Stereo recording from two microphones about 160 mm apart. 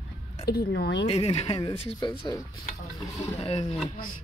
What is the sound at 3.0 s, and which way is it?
Speech, 15° left (ahead or behind).